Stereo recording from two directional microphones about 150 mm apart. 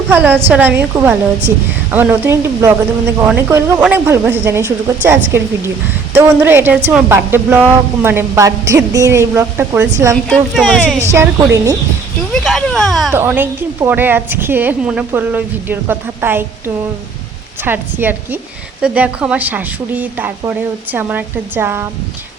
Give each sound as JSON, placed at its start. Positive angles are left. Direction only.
{"t": 0.1, "sound": "a woman's voice", "side_deg": -10}
{"t": 10.2, "sound": "speech", "side_deg": 0}
{"t": 11.0, "sound": "speech", "side_deg": -20}
{"t": 12.3, "sound": "a sound", "side_deg": 5}
{"t": 13.1, "sound": "a woman's voice", "side_deg": -15}